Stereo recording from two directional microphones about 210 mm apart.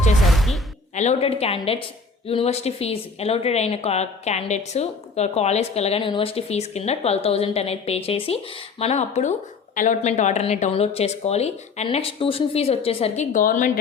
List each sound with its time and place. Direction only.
0.3 s music: centre (ahead or behind)
0.9 s a woman's voice: 30° left (ahead or behind)